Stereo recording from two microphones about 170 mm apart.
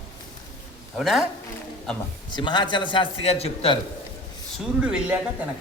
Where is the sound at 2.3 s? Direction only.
25° left (ahead or behind).